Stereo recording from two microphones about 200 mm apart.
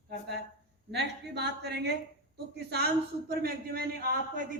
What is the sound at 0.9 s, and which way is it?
A woman's voice, 55° right (ahead or behind).